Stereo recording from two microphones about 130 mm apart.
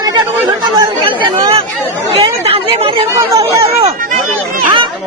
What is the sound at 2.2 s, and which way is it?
Chatter, 45° right (ahead or behind).